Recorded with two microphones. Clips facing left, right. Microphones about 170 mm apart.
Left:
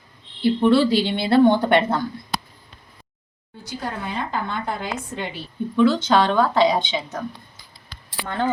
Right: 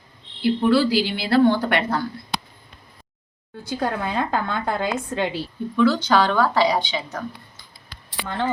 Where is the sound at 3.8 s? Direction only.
90° right.